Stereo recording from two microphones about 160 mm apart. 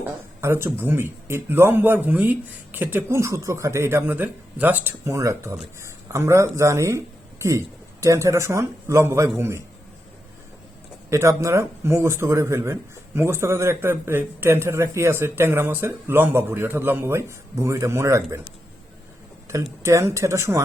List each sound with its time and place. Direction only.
0.0 s speech: 15° right (ahead or behind)
8.0 s speech: 20° right (ahead or behind)
11.1 s speech: 20° right (ahead or behind)
19.8 s speech: 20° right (ahead or behind)